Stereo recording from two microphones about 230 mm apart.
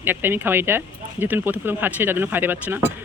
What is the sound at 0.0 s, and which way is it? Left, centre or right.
Speech, centre.